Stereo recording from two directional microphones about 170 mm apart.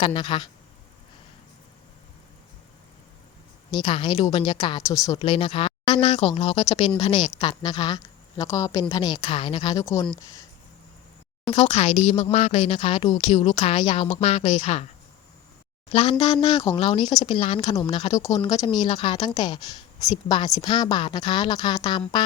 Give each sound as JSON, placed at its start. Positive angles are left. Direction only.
{"t": 0.0, "sound": "a woman's voice", "side_deg": 30}
{"t": 3.7, "sound": "a woman's voice", "side_deg": 30}
{"t": 7.6, "sound": "a woman's voice", "side_deg": 25}
{"t": 11.5, "sound": "a woman's voice", "side_deg": 40}
{"t": 15.9, "sound": "a woman's voice", "side_deg": 35}